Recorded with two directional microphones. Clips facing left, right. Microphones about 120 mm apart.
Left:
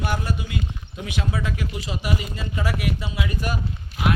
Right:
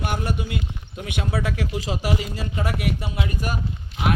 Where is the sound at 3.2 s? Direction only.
40° right (ahead or behind).